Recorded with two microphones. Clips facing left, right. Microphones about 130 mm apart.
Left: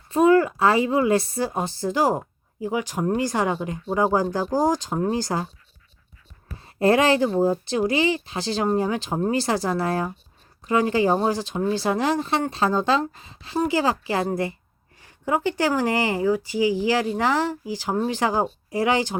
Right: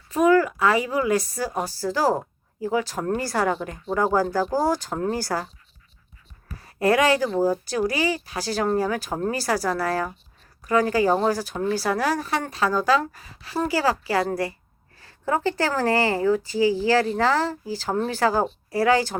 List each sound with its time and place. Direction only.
0.1 s speech: 30° left (ahead or behind)
6.6 s speech: 25° left (ahead or behind)